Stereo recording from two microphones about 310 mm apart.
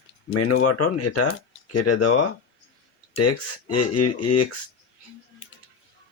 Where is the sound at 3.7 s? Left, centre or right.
Left.